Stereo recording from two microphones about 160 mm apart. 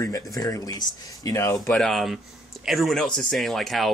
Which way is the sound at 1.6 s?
Centre (ahead or behind).